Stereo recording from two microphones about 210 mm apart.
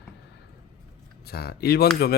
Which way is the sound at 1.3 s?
50° left (ahead or behind).